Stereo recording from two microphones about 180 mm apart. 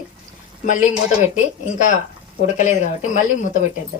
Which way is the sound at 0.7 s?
45° left (ahead or behind).